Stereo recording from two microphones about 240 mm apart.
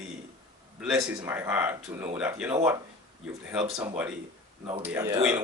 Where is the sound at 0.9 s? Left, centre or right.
Centre.